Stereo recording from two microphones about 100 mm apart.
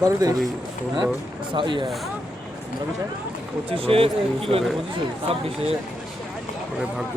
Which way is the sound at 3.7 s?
70° right (ahead or behind).